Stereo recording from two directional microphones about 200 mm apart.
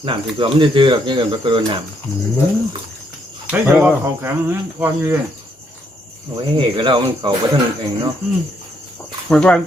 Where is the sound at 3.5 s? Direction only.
10° right (ahead or behind).